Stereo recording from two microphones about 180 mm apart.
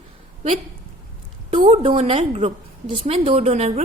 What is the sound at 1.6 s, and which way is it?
A woman's voice, 30° right (ahead or behind).